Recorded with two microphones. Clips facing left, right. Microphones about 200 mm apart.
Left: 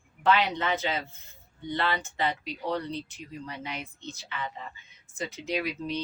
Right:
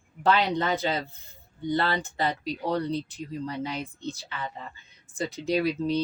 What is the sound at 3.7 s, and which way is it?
Speech, 35° right (ahead or behind).